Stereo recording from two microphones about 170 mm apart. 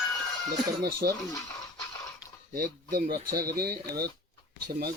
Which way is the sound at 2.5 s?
55° right (ahead or behind).